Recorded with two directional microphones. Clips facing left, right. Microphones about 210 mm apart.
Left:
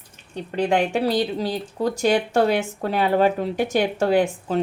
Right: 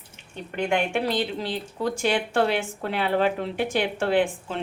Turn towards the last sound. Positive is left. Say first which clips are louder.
# left 3 dB
turn(degrees=40)  # may be behind; listen again after turning